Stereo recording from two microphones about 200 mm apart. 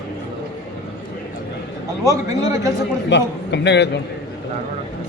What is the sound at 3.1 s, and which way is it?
Speech, 60° left (ahead or behind).